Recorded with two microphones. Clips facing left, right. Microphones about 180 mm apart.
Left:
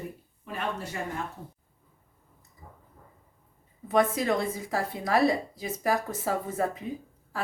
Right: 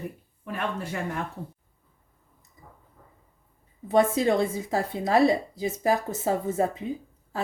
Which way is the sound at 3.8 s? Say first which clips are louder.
Right 3 dB; 25° right (ahead or behind).